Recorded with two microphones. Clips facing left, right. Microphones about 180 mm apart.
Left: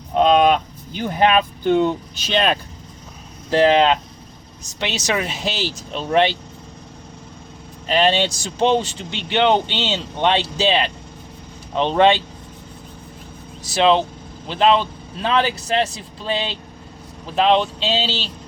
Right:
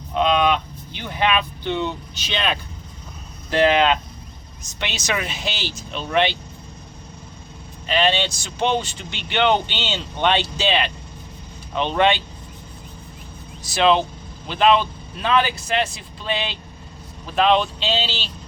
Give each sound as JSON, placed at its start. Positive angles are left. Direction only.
{"t": 0.2, "sound": "speech", "side_deg": 45}
{"t": 3.5, "sound": "speech", "side_deg": 30}
{"t": 7.9, "sound": "speech", "side_deg": 40}
{"t": 13.7, "sound": "speech", "side_deg": 25}